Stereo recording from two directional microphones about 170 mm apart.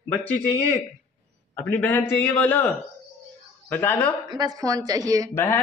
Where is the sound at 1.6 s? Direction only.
10° left (ahead or behind).